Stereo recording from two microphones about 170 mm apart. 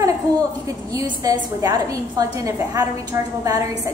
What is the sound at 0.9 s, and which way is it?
A woman's voice, 20° right (ahead or behind).